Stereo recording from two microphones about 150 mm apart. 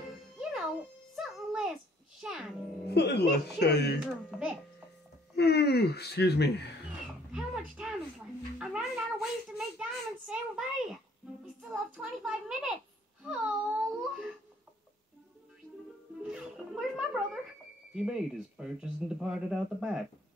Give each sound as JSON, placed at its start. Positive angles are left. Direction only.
{"t": 0.4, "sound": "music", "side_deg": -5}
{"t": 2.9, "sound": "speech", "side_deg": 90}
{"t": 4.0, "sound": "a child's voice", "side_deg": -5}
{"t": 5.3, "sound": "speech", "side_deg": 90}
{"t": 7.3, "sound": "a sound", "side_deg": -5}
{"t": 8.5, "sound": "music", "side_deg": -5}
{"t": 9.6, "sound": "a sound", "side_deg": -5}
{"t": 13.2, "sound": "baby cry", "side_deg": -5}
{"t": 16.3, "sound": "music", "side_deg": -5}
{"t": 17.9, "sound": "speech", "side_deg": -5}